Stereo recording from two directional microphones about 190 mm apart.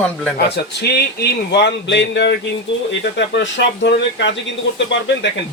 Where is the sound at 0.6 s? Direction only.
60° left (ahead or behind).